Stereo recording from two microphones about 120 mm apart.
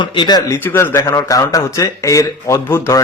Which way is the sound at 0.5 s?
20° left (ahead or behind).